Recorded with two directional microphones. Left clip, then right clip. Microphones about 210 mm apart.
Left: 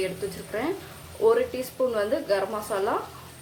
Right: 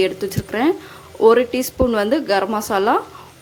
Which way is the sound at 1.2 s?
45° right (ahead or behind).